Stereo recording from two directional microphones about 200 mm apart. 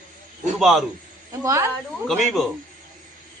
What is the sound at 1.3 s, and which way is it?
Speech, 15° right (ahead or behind).